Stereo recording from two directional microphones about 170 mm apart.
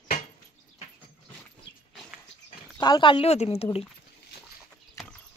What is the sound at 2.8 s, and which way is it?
Speech, 25° left (ahead or behind).